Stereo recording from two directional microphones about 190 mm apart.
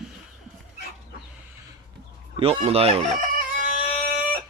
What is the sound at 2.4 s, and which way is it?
Speech, 30° right (ahead or behind).